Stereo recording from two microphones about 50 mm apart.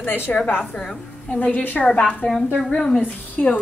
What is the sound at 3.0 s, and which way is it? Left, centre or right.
Speech, left.